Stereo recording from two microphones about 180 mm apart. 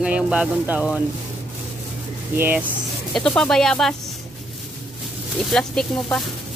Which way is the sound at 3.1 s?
5° left (ahead or behind).